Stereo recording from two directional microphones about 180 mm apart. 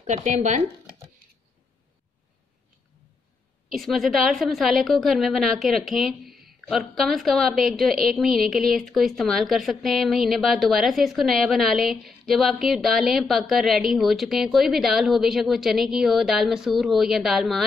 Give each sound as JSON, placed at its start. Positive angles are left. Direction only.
{"t": 0.0, "sound": "speech", "side_deg": -45}
{"t": 3.7, "sound": "a woman's voice", "side_deg": 0}